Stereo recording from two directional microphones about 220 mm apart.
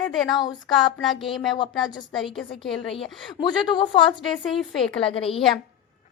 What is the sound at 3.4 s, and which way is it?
Speech, 20° left (ahead or behind).